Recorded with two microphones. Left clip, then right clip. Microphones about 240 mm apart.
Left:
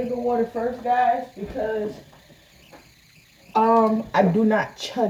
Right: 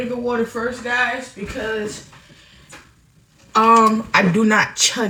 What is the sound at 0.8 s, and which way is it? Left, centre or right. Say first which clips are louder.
Speech: left 1 dB; left.